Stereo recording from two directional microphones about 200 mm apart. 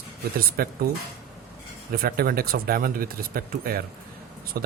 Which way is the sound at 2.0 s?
50° right (ahead or behind).